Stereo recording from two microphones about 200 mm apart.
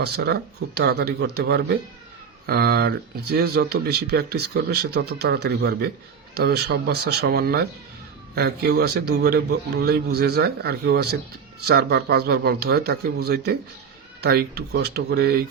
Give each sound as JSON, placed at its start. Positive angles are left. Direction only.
{"t": 0.0, "sound": "speech", "side_deg": -55}